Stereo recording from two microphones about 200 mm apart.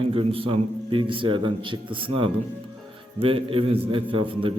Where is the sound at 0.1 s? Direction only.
25° right (ahead or behind).